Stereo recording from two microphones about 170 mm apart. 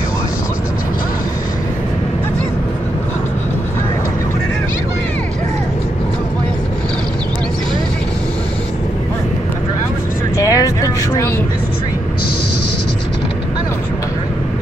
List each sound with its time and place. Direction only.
10.3 s vehicle: 20° left (ahead or behind)